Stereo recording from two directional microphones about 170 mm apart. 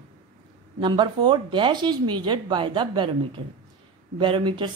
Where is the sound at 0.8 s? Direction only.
25° right (ahead or behind).